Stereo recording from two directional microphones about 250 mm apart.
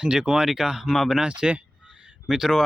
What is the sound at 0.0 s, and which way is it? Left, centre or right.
Speech, centre.